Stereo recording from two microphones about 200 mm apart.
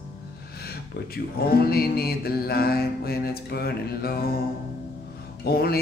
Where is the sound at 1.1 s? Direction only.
50° left (ahead or behind).